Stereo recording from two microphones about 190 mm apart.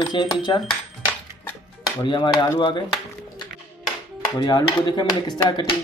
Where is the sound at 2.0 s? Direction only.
25° left (ahead or behind).